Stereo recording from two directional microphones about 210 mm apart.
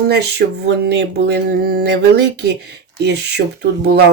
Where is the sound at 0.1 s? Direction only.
50° right (ahead or behind).